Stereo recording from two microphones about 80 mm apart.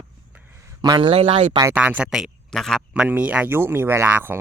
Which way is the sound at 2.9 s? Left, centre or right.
Centre.